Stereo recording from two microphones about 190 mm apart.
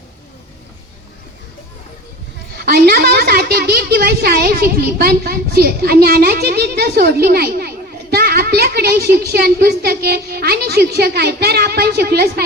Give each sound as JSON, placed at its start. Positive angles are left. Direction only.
{"t": 2.6, "sound": "a woman's voice", "side_deg": -55}